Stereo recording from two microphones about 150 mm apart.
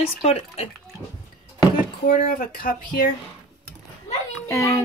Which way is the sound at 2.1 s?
70° left (ahead or behind).